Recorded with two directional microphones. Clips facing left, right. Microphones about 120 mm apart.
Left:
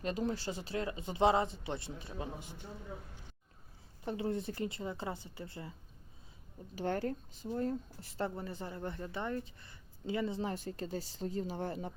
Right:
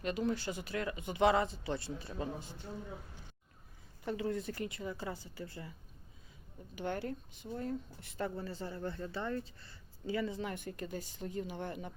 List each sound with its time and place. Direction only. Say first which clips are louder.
0.0 s speech: right 1 dB; 35° left (ahead or behind); by 2.6 s 15° left (ahead or behind)
4.0 s speech: even; 25° left (ahead or behind)
6.7 s speech: left 3 dB; 40° left (ahead or behind)